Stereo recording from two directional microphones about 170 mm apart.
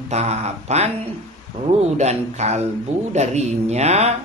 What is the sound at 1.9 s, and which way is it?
Speech, 40° right (ahead or behind).